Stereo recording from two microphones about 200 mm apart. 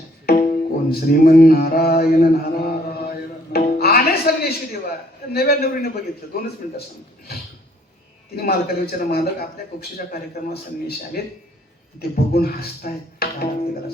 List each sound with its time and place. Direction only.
0.3 s music: 45° left (ahead or behind)
3.1 s speech: 50° left (ahead or behind)
8.4 s speech: 50° left (ahead or behind)